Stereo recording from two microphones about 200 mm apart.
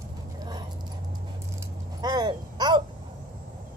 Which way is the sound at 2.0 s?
20° right (ahead or behind).